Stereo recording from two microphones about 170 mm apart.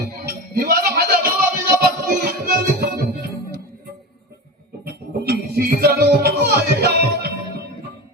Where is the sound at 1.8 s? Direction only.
60° right (ahead or behind).